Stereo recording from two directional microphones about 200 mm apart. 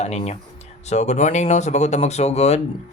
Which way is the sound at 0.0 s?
35° left (ahead or behind).